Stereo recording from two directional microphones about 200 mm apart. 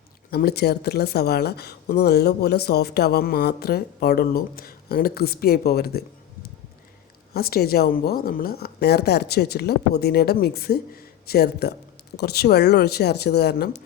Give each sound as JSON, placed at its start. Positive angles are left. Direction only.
{"t": 0.3, "sound": "speech", "side_deg": 50}
{"t": 7.3, "sound": "speech", "side_deg": 50}